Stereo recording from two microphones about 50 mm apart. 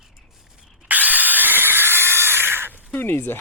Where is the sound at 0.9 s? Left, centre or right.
Right.